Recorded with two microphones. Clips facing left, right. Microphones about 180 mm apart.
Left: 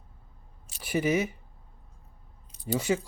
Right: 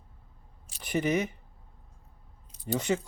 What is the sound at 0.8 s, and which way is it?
Speech, 5° left (ahead or behind).